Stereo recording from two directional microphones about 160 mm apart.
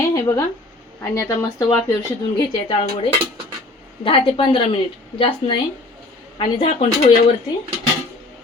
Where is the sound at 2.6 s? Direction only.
30° left (ahead or behind).